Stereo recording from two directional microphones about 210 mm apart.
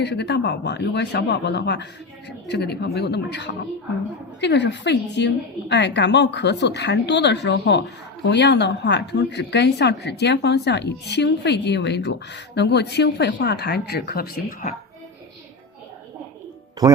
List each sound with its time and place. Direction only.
0.0 s a woman's voice: 55° left (ahead or behind)
16.8 s speech: 15° right (ahead or behind)